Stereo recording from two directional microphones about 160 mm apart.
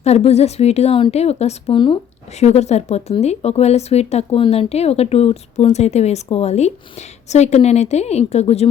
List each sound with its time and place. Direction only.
0.0 s a woman's voice: 40° left (ahead or behind)
2.4 s speech: 45° left (ahead or behind)